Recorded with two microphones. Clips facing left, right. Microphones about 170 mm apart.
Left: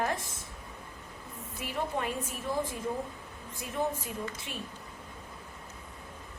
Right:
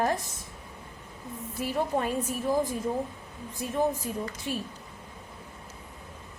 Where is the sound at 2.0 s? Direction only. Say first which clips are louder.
Right 6 dB; 40° right (ahead or behind).